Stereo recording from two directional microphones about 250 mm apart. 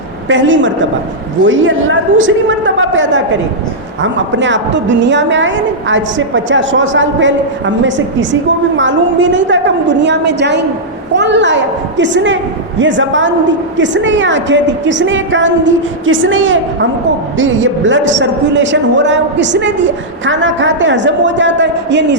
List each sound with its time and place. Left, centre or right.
0.3 s a woman's voice: right